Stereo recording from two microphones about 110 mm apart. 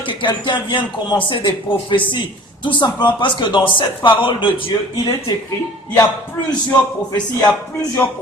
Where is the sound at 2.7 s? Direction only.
45° left (ahead or behind).